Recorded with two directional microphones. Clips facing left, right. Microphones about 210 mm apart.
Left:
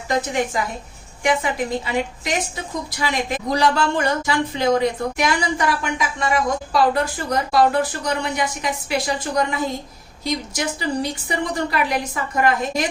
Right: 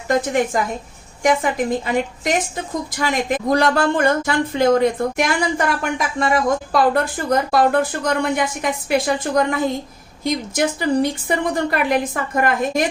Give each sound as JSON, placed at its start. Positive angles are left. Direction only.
{"t": 1.2, "sound": "a woman's voice", "side_deg": -45}